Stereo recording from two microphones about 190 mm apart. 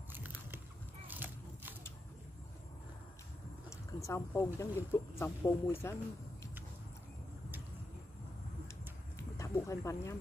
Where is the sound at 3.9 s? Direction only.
15° left (ahead or behind).